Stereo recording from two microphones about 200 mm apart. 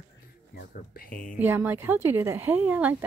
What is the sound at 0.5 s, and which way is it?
Speech, 45° left (ahead or behind).